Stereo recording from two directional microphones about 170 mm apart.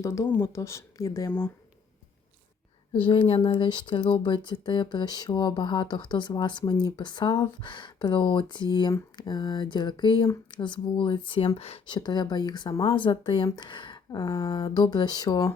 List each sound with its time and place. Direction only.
0.0 s speech: 20° left (ahead or behind)
2.9 s speech: 30° left (ahead or behind)